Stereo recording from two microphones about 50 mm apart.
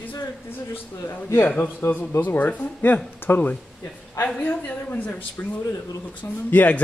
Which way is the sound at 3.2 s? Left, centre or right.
Left.